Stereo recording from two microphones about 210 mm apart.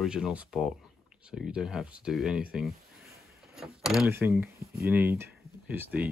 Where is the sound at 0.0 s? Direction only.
5° right (ahead or behind).